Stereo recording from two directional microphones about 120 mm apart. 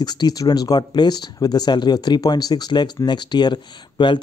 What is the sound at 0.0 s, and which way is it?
Speech, 35° left (ahead or behind).